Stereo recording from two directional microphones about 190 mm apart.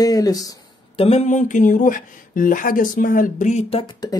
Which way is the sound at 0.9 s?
35° left (ahead or behind).